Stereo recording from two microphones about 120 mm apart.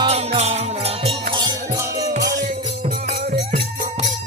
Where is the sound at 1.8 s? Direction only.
30° right (ahead or behind).